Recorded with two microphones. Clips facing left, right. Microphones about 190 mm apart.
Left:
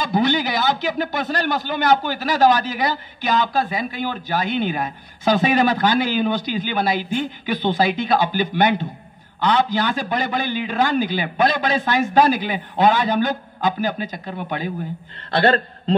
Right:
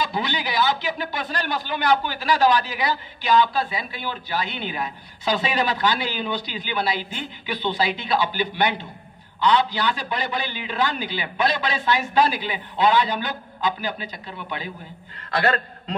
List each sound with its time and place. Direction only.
0.0 s a man's voice: 45° left (ahead or behind)
15.3 s a man's voice: 30° left (ahead or behind)